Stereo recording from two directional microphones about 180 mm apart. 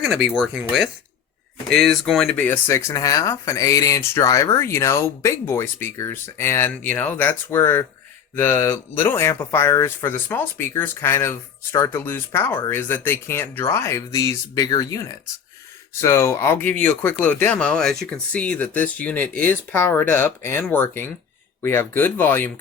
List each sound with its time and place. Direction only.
0.3 s speech: centre (ahead or behind)